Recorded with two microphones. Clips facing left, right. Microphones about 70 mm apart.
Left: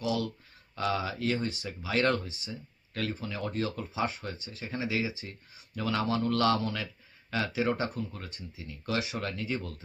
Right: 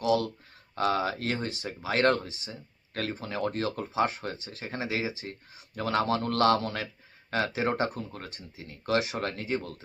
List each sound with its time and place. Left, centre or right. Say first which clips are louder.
0.0 s speech: right 5 dB; right